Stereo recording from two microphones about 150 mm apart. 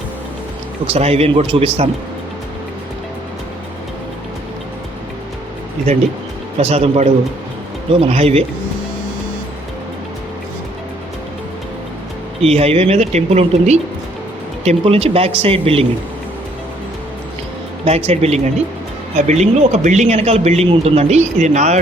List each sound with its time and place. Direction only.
0.9 s speech: 45° right (ahead or behind)
6.6 s speech: 45° right (ahead or behind)
12.4 s speech: 45° right (ahead or behind)
17.8 s speech: 45° right (ahead or behind)